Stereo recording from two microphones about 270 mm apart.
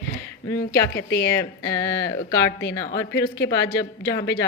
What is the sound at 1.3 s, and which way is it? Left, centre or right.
Speech, centre.